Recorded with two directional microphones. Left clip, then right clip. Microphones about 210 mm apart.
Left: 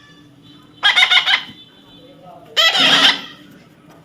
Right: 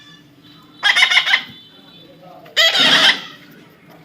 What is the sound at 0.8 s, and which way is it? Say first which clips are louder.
Fowl: left 1 dB; centre (ahead or behind).